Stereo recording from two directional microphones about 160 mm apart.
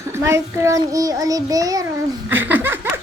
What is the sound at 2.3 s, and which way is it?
Laughter, 10° right (ahead or behind).